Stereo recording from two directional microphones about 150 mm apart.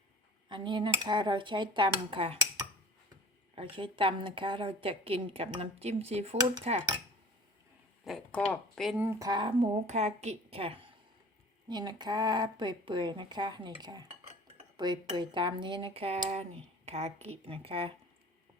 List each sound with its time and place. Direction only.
0.4 s a woman's voice: 30° right (ahead or behind)
3.5 s a woman's voice: 35° right (ahead or behind)
8.0 s speech: 5° left (ahead or behind)
9.0 s a woman's voice: 20° right (ahead or behind); by 10.8 s 40° right (ahead or behind)
11.7 s a woman's voice: 30° right (ahead or behind)